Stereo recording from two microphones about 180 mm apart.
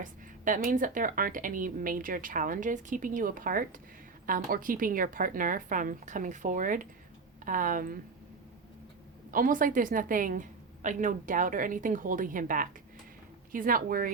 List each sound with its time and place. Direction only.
0.0 s speech: 45° right (ahead or behind)
9.3 s speech: 50° right (ahead or behind)